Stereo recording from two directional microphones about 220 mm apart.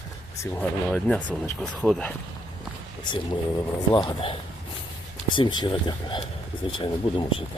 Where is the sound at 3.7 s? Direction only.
20° left (ahead or behind).